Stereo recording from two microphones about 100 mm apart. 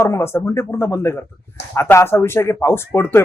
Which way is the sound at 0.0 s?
25° left (ahead or behind).